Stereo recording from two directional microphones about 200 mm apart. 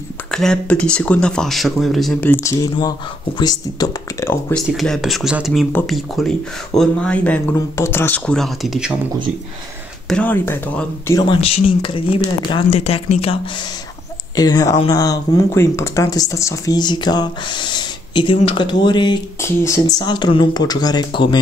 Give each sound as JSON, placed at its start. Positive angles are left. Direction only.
{"t": 0.3, "sound": "speech", "side_deg": 5}
{"t": 4.6, "sound": "speech", "side_deg": 0}
{"t": 10.0, "sound": "speech", "side_deg": 5}
{"t": 11.1, "sound": "speech", "side_deg": 25}
{"t": 14.3, "sound": "speech", "side_deg": 20}